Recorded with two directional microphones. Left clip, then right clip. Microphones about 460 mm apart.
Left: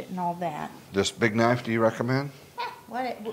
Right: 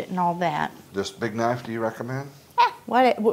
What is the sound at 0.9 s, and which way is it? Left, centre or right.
Speech, left.